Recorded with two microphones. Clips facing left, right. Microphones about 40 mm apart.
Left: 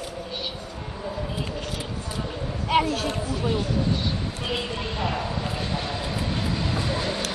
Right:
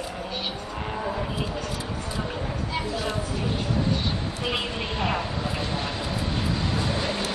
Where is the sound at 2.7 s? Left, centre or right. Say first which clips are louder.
Left 8 dB; left.